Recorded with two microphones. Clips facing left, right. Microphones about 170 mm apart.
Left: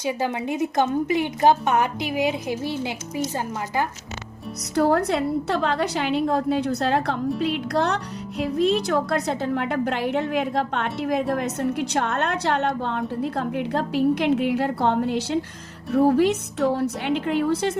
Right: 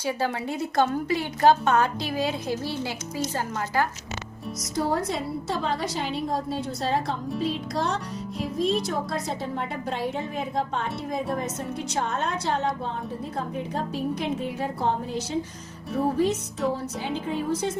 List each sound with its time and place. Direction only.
0.0 s a woman's voice: 20° left (ahead or behind)
4.8 s speech: 65° left (ahead or behind)